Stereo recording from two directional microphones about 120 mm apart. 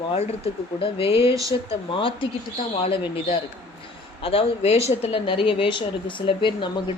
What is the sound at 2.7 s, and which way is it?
A woman's voice, 50° left (ahead or behind).